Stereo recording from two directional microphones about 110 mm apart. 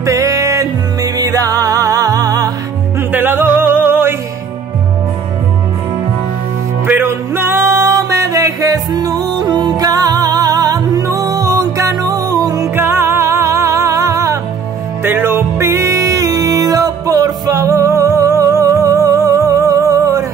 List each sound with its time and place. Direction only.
0.0 s music: 30° right (ahead or behind)
3.0 s music: 20° right (ahead or behind)
6.9 s music: 20° right (ahead or behind)